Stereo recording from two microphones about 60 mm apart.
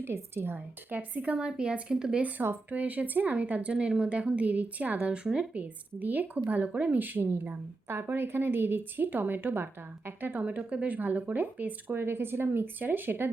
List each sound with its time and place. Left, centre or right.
0.0 s speech: right; by 2.2 s centre
2.4 s speech: right; by 5.5 s centre
5.5 s a woman's voice: right
10.4 s a woman's voice: right